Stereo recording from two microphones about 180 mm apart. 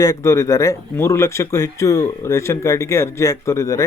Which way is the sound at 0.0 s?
15° left (ahead or behind).